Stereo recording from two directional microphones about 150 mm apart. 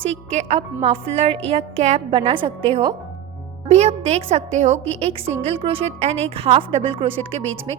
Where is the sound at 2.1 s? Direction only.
35° right (ahead or behind).